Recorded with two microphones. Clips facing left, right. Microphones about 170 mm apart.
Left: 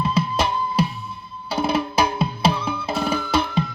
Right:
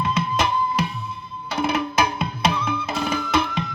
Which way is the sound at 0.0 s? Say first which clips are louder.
Left 1 dB; 30° left (ahead or behind).